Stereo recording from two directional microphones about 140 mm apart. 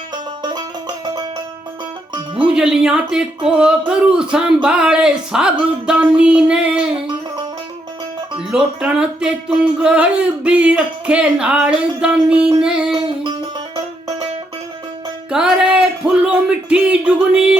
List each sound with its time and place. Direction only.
2.3 s speech: 5° right (ahead or behind)
8.4 s speech: 5° right (ahead or behind)
12.9 s music: 35° right (ahead or behind)
15.3 s speech: 5° right (ahead or behind)